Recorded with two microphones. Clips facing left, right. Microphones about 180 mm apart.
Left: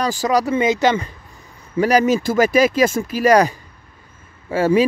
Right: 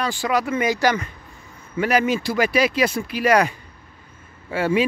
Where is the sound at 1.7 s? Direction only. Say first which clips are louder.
Left 5 dB; 40° left (ahead or behind).